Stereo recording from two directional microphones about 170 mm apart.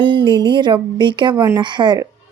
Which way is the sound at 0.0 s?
30° right (ahead or behind).